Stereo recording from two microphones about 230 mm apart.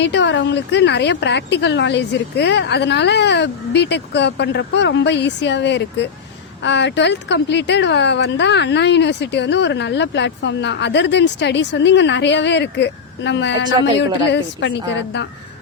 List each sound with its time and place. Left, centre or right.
0.0 s speech: left